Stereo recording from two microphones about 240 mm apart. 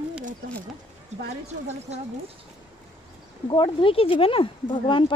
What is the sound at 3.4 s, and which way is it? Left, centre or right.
Speech, left.